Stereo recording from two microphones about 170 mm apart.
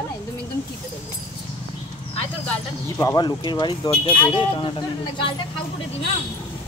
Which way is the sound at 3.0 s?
20° left (ahead or behind).